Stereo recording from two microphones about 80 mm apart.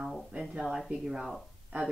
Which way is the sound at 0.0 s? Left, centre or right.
Centre.